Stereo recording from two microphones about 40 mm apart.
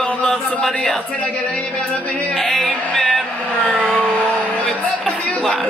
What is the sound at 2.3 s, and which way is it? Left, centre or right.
Speech, centre.